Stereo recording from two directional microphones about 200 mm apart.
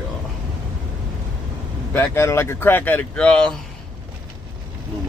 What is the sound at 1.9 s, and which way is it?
Speech, 15° left (ahead or behind).